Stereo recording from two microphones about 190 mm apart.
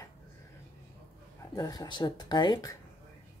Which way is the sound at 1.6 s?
20° left (ahead or behind).